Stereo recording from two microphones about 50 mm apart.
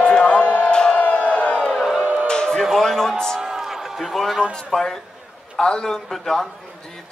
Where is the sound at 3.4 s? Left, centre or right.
Centre.